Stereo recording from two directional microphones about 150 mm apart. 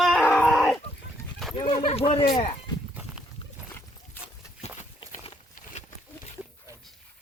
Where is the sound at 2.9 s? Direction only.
10° right (ahead or behind).